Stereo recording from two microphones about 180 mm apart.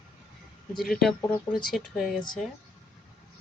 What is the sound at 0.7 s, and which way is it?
Speech, centre (ahead or behind).